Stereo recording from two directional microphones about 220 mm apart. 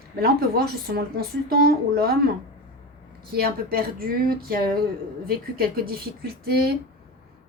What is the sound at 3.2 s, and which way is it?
A woman's voice, 45° right (ahead or behind).